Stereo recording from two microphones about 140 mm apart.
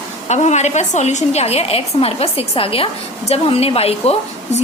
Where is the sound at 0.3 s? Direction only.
55° left (ahead or behind).